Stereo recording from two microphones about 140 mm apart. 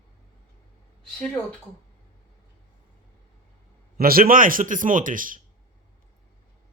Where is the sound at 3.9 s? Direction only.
90° right.